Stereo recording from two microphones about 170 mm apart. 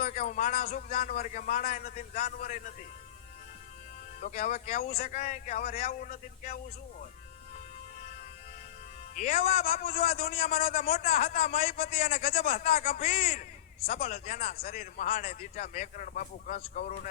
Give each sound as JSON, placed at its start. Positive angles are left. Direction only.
{"t": 0.0, "sound": "a man's voice", "side_deg": 50}
{"t": 4.2, "sound": "a man's voice", "side_deg": 45}
{"t": 9.1, "sound": "a man's voice", "side_deg": 40}
{"t": 10.6, "sound": "a man's voice", "side_deg": 65}
{"t": 11.0, "sound": "a man's voice", "side_deg": 40}
{"t": 11.7, "sound": "a man's voice", "side_deg": 65}
{"t": 11.9, "sound": "a man's voice", "side_deg": 40}
{"t": 14.1, "sound": "a man's voice", "side_deg": 55}
{"t": 14.5, "sound": "a man's voice", "side_deg": 65}
{"t": 14.8, "sound": "a man's voice", "side_deg": 40}